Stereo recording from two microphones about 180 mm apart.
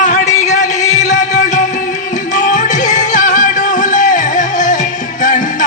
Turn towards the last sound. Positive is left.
turn(degrees=45)  # may be behind; listen again after turning